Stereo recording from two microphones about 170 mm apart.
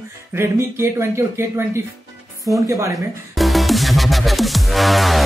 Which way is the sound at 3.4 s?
Centre (ahead or behind).